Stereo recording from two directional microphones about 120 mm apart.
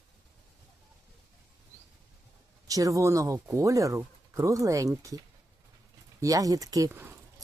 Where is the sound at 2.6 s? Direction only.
30° right (ahead or behind).